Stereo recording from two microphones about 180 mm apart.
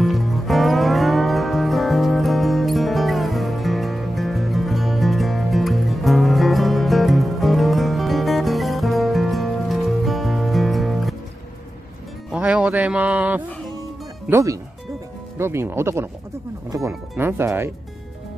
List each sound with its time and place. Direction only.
0.0 s music: centre (ahead or behind)
12.3 s music: 5° right (ahead or behind)
14.3 s speech: 15° right (ahead or behind)
17.2 s speech: 15° right (ahead or behind)